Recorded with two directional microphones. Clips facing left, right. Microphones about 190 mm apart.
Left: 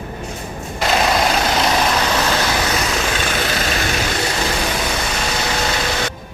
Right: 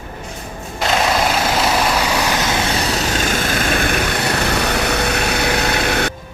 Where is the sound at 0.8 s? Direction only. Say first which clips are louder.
Even; centre (ahead or behind).